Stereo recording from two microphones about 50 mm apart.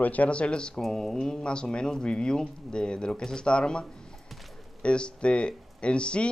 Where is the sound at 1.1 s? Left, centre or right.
Centre.